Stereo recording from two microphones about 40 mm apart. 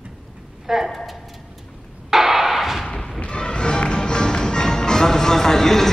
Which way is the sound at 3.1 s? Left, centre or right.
Left.